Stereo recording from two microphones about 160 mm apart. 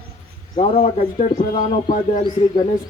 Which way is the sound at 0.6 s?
40° left (ahead or behind).